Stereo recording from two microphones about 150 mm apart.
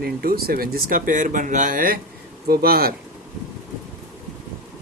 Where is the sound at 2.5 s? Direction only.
90° right.